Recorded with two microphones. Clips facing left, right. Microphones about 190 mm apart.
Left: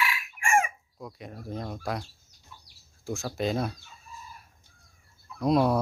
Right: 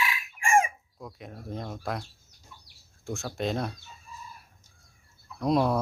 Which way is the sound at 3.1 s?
Centre (ahead or behind).